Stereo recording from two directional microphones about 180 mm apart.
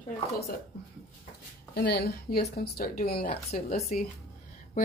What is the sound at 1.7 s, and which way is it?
Speech, 60° left (ahead or behind).